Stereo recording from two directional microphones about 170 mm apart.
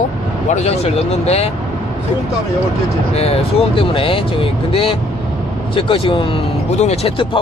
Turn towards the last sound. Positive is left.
turn(degrees=35)  # may be behind; listen again after turning